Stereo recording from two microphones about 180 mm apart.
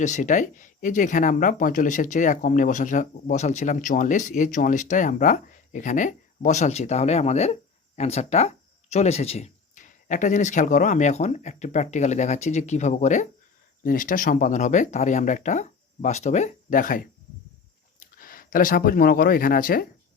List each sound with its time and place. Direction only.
0.0 s speech: 40° left (ahead or behind)